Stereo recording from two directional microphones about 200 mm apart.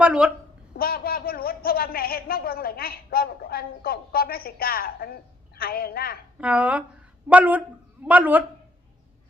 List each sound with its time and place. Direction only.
0.0 s a woman's voice: 5° right (ahead or behind)
0.8 s speech: 50° left (ahead or behind)
6.4 s a man's voice: 5° right (ahead or behind)